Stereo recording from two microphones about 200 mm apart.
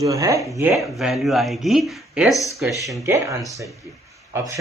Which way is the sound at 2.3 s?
15° left (ahead or behind).